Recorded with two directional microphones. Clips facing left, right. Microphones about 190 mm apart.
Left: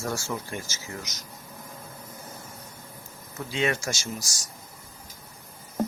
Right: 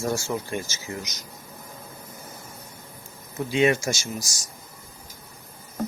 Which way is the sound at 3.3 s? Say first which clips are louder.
Right 6 dB; 15° right (ahead or behind).